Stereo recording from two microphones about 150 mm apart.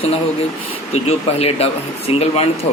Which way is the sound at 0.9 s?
45° left (ahead or behind).